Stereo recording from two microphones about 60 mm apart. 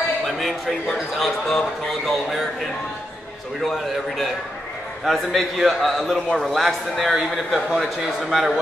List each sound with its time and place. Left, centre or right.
0.4 s speech: centre
3.6 s speech: centre